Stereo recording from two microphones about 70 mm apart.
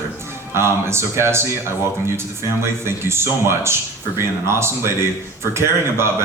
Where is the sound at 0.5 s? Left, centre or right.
Right.